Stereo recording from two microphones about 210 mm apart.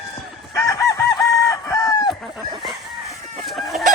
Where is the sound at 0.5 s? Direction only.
15° left (ahead or behind).